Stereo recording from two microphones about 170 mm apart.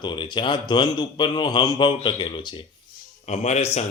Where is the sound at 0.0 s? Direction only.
30° left (ahead or behind).